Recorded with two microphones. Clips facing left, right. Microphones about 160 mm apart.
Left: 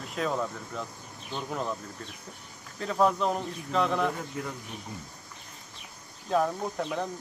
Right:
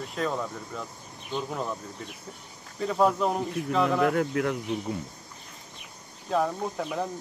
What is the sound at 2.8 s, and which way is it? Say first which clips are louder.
Speech: right 2 dB; 5° right (ahead or behind).